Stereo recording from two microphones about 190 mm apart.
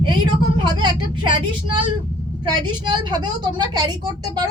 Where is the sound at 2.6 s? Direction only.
25° right (ahead or behind).